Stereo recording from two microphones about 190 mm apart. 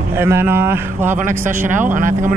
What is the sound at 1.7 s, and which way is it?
Speech, 45° right (ahead or behind).